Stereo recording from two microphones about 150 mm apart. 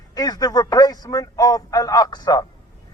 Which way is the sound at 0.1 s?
25° left (ahead or behind).